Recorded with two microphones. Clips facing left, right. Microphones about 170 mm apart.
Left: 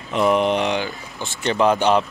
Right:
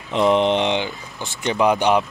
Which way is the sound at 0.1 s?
20° right (ahead or behind).